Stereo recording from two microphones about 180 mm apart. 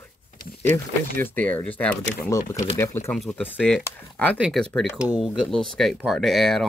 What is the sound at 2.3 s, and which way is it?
Speech, 20° left (ahead or behind).